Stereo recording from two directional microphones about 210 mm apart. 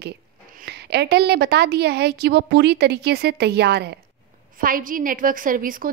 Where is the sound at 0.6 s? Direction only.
50° right (ahead or behind).